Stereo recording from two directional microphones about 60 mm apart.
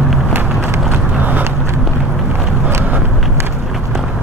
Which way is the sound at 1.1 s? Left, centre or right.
Right.